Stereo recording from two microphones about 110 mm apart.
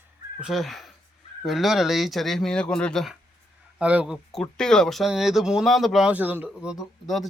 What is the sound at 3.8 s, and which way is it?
Speech, 10° right (ahead or behind).